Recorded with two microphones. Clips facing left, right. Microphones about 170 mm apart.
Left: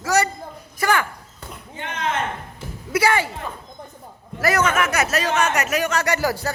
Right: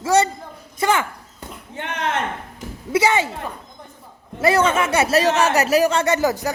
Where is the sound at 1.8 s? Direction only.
65° right (ahead or behind).